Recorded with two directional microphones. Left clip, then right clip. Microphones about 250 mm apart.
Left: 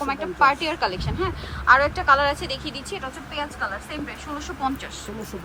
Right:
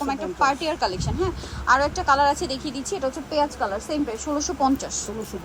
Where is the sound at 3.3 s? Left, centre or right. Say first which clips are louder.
Right 4 dB; right.